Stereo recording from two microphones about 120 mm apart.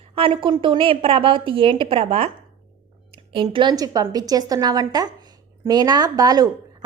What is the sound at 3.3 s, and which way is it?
Speech, 45° right (ahead or behind).